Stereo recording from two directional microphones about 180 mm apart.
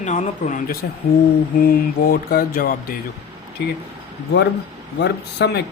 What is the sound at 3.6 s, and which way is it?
Speech, 65° left (ahead or behind).